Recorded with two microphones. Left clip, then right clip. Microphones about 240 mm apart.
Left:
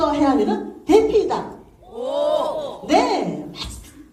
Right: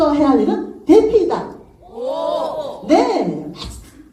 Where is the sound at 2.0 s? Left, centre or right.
Left.